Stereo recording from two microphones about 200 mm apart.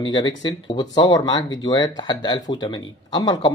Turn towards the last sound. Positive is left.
turn(degrees=20)  # may be behind; listen again after turning